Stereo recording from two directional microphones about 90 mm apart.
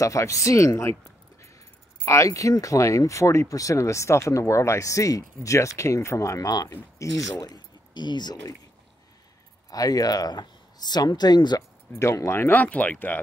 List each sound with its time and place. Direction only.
0.0 s speech: 35° left (ahead or behind)
2.0 s speech: 35° left (ahead or behind); by 8.5 s 50° left (ahead or behind)
9.7 s speech: 45° left (ahead or behind)
11.9 s speech: 35° left (ahead or behind); by 13.2 s 20° left (ahead or behind)